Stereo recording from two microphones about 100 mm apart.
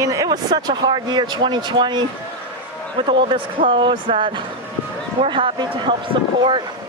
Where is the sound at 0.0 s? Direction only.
35° right (ahead or behind); by 2.0 s 50° right (ahead or behind).